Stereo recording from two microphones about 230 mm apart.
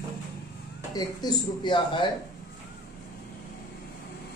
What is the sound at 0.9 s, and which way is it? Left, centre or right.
Speech, centre.